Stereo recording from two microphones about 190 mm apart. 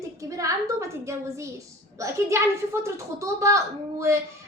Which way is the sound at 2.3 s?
15° right (ahead or behind).